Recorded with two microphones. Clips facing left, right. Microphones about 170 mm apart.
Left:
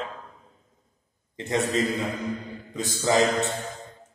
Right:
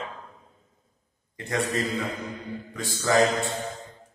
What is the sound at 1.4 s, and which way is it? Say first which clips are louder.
A man's voice: left 3 dB; 25° left (ahead or behind).